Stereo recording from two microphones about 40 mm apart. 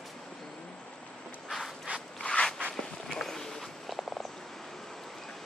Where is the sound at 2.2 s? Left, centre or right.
Left.